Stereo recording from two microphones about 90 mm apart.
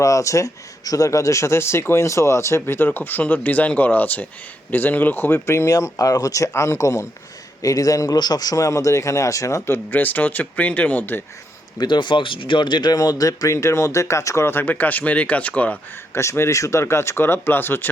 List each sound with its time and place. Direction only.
0.0 s speech: 35° left (ahead or behind)
11.8 s speech: 60° left (ahead or behind); by 15.8 s 15° left (ahead or behind)
16.1 s speech: 30° left (ahead or behind)